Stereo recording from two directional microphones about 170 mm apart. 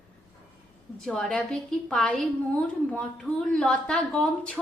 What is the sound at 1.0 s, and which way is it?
A woman's voice, 5° left (ahead or behind).